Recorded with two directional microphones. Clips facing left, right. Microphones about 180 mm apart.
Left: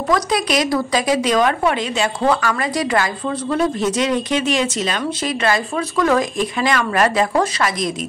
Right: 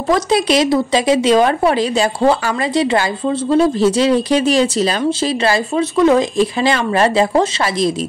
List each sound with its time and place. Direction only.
0.1 s speech: 25° right (ahead or behind)